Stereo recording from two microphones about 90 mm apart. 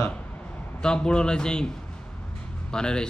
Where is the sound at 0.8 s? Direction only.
10° left (ahead or behind).